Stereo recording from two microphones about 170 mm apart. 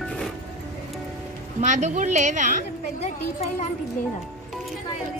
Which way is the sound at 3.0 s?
40° left (ahead or behind).